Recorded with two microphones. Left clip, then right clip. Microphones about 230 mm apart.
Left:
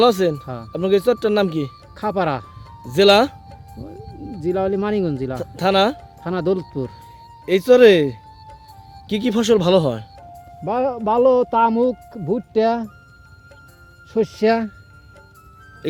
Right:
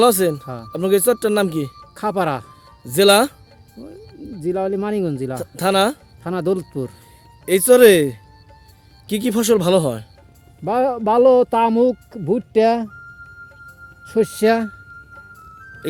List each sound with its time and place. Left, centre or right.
0.0 s speech: centre
10.7 s speech: centre
14.1 s speech: centre